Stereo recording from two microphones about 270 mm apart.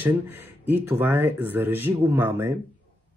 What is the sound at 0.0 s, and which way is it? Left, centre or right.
Speech, centre.